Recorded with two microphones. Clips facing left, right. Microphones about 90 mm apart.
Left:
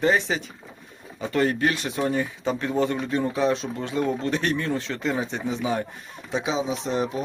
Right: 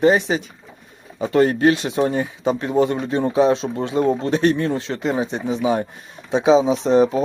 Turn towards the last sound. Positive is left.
turn(degrees=-35)  # may be behind; listen again after turning